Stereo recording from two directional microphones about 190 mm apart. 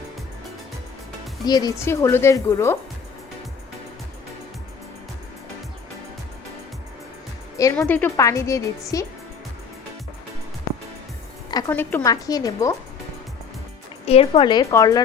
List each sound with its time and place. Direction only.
1.5 s a woman's voice: 20° left (ahead or behind)
7.6 s a woman's voice: 10° left (ahead or behind)
11.7 s a woman's voice: 10° left (ahead or behind)
14.0 s speech: 30° left (ahead or behind)